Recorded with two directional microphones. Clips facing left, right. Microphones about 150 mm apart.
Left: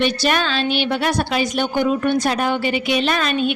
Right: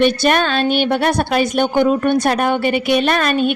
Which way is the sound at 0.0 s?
50° right (ahead or behind).